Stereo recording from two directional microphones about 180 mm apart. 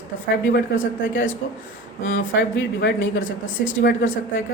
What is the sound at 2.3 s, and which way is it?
A woman's voice, 90° left.